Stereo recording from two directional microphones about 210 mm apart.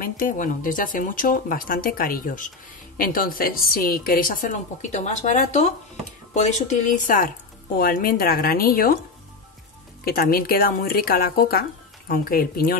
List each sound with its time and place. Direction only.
0.0 s a woman's voice: 40° left (ahead or behind)
10.0 s speech: 45° left (ahead or behind)